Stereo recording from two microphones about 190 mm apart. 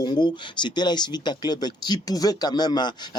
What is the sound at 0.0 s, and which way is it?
Speech, 25° left (ahead or behind).